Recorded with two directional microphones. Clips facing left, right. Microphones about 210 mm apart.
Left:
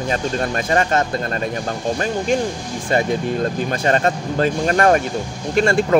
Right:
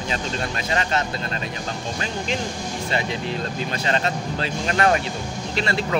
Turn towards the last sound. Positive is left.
turn(degrees=50)  # may be behind; listen again after turning